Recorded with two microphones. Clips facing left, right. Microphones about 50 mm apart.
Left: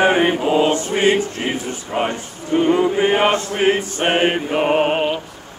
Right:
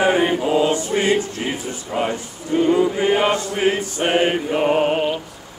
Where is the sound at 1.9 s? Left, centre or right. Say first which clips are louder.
Left 1 dB; left.